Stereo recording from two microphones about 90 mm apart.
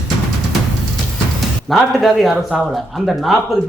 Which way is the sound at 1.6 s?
Centre (ahead or behind).